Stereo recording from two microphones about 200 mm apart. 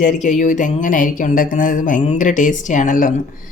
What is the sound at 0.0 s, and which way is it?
Speech, 40° left (ahead or behind).